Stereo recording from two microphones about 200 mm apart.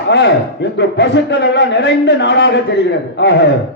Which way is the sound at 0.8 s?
60° left (ahead or behind).